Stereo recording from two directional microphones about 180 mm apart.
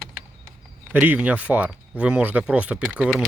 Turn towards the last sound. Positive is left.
turn(degrees=0)  # may be behind; listen again after turning